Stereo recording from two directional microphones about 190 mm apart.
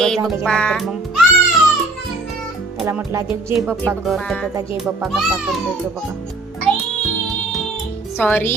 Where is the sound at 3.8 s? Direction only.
5° left (ahead or behind).